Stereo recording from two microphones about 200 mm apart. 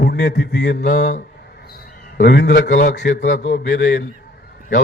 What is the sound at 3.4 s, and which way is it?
Speech, 40° left (ahead or behind).